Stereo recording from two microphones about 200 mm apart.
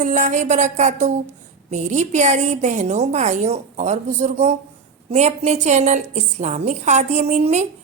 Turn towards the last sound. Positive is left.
turn(degrees=-35)  # may be behind; listen again after turning